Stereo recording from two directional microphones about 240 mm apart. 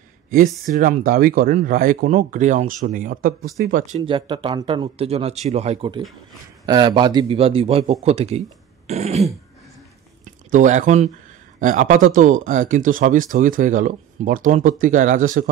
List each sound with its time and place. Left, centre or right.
0.7 s a man's voice: right
10.5 s speech: right